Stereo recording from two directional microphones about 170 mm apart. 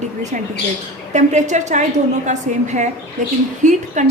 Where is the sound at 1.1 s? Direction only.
45° right (ahead or behind).